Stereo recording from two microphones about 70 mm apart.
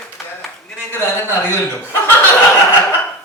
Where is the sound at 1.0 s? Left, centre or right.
Left.